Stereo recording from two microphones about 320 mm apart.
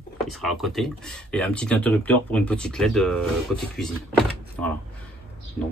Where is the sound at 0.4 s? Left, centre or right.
Centre.